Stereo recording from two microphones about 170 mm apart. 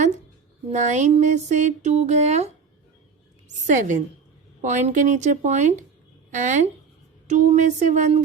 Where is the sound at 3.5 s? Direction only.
45° right (ahead or behind).